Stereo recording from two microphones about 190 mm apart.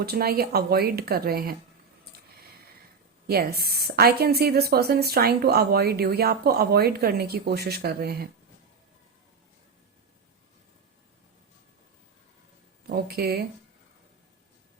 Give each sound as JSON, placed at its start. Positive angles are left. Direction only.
{"t": 0.0, "sound": "speech", "side_deg": -55}
{"t": 3.2, "sound": "speech", "side_deg": -55}
{"t": 12.9, "sound": "speech", "side_deg": -55}